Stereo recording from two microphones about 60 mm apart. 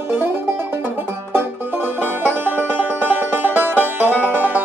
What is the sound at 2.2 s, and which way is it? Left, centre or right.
Music, right.